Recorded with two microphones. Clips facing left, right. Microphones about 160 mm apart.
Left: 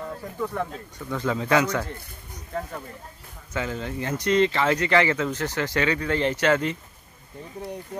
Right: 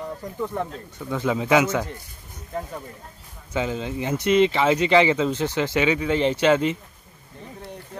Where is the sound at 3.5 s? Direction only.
15° right (ahead or behind).